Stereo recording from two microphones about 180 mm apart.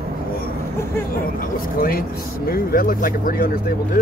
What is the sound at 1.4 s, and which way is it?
Speech, 55° left (ahead or behind).